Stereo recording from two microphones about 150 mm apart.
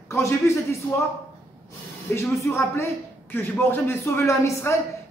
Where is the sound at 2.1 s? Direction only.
15° left (ahead or behind).